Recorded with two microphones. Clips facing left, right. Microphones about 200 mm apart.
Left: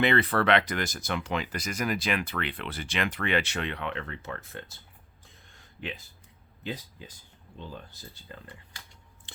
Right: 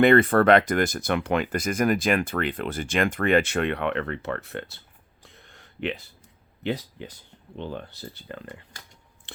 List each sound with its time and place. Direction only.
0.0 s speech: 50° right (ahead or behind); by 4.8 s 70° right (ahead or behind)
5.2 s a sound: 70° right (ahead or behind)
6.6 s speech: 70° right (ahead or behind)